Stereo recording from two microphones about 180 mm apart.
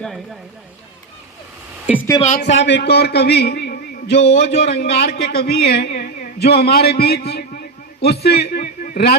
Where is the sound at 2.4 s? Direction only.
85° left.